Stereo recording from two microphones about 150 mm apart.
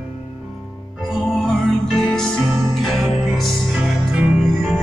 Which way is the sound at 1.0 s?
Centre (ahead or behind).